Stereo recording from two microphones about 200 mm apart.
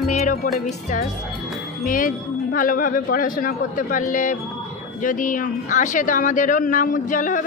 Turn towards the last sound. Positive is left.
turn(degrees=40)  # may be behind; listen again after turning